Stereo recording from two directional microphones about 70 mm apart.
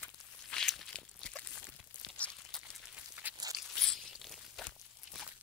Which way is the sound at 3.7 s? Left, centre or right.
Centre.